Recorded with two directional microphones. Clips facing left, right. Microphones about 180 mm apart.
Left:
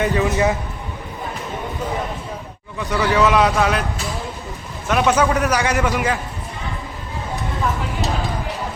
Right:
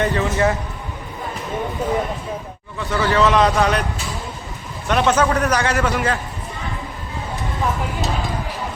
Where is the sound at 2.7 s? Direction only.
15° left (ahead or behind).